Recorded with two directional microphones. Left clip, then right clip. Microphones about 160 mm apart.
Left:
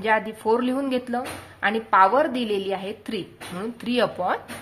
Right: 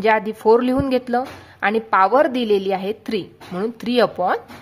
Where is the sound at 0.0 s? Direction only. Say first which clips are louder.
Right 6 dB; 40° right (ahead or behind).